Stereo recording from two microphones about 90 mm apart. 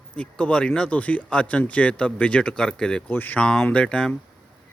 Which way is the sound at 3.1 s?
20° left (ahead or behind).